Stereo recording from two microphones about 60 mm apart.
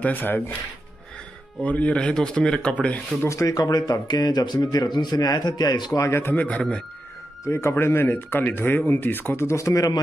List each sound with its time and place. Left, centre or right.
0.0 s speech: left
1.6 s speech: left
2.0 s speech: centre
3.3 s speech: left
5.9 s speech: left
6.3 s speech: left
7.4 s speech: left
9.5 s speech: left